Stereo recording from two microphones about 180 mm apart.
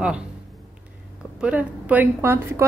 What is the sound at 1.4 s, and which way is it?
Speech, 10° right (ahead or behind).